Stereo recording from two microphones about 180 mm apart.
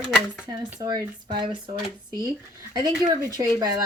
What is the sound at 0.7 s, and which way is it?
Speech, 20° right (ahead or behind).